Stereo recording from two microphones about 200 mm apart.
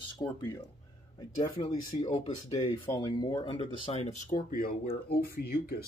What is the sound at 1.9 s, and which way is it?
Speech, 30° left (ahead or behind).